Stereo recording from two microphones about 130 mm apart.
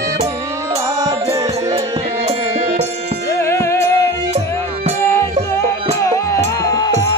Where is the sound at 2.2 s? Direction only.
55° right (ahead or behind).